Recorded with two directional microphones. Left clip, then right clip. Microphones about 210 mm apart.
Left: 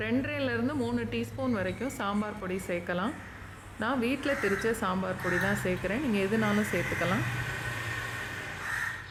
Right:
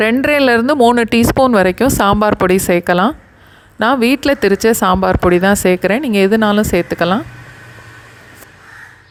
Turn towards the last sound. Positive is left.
turn(degrees=-45)  # may be behind; listen again after turning